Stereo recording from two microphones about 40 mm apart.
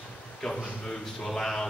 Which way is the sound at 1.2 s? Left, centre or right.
Centre.